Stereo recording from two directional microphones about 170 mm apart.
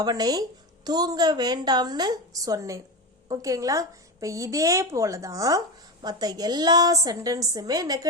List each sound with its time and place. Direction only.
0.0 s a woman's voice: 20° right (ahead or behind)